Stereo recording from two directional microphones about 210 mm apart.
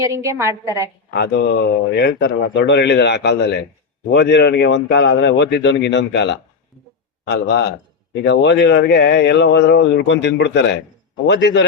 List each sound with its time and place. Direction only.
0.0 s a woman's voice: 15° right (ahead or behind)
1.1 s a man's voice: 55° left (ahead or behind)